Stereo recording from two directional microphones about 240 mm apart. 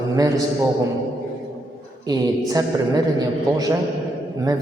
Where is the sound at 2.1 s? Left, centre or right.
Centre.